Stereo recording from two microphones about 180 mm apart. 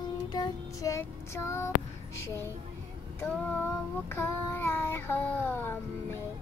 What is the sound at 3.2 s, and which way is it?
Child singing, 10° left (ahead or behind).